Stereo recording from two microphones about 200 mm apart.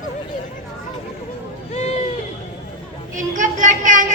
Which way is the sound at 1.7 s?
35° left (ahead or behind).